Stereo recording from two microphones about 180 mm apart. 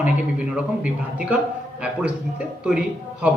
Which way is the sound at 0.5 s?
5° right (ahead or behind).